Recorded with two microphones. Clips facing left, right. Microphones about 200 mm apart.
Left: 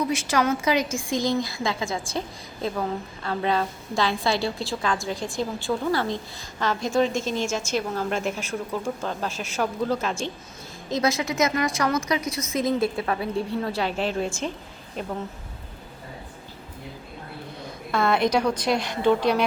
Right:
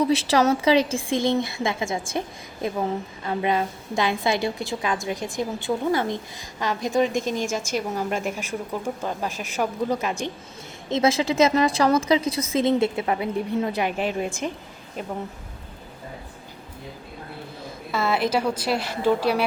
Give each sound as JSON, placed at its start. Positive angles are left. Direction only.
{"t": 0.0, "sound": "a woman's voice", "side_deg": -35}
{"t": 10.8, "sound": "speech", "side_deg": -25}
{"t": 17.9, "sound": "a woman's voice", "side_deg": -5}